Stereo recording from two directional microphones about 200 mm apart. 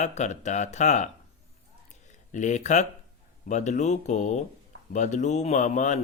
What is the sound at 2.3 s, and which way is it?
Speech, 35° left (ahead or behind).